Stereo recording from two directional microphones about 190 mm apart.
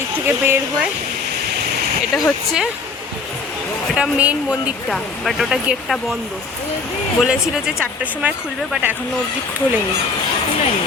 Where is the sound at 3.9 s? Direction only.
5° right (ahead or behind).